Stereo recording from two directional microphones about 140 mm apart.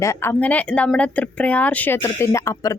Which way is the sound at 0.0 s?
20° left (ahead or behind).